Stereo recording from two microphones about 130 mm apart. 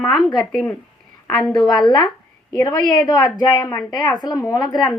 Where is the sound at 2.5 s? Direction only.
30° left (ahead or behind).